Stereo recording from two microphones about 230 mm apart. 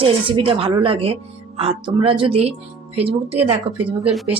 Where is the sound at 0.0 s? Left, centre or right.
Right.